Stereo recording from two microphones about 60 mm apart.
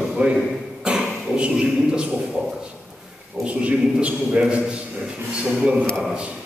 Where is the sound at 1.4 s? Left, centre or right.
Centre.